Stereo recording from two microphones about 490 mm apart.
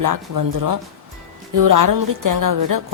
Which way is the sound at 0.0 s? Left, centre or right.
Right.